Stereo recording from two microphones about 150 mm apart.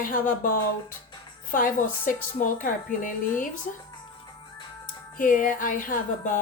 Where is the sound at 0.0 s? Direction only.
70° left (ahead or behind).